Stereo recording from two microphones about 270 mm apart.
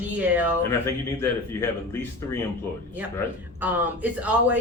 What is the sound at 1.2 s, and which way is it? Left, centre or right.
Speech, centre.